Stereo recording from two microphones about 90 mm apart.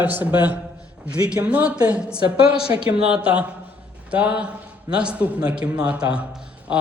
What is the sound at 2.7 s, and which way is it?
Speech, 35° right (ahead or behind).